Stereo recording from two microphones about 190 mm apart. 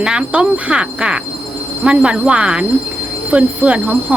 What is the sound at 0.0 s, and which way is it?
Speech, 5° right (ahead or behind).